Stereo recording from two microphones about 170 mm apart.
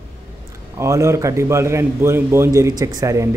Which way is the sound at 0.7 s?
15° right (ahead or behind).